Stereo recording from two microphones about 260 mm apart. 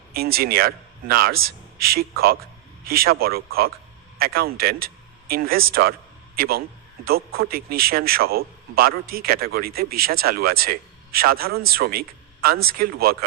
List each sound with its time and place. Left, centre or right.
0.1 s a man's voice: right